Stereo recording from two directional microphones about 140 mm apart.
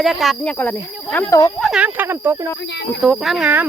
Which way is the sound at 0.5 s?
10° left (ahead or behind).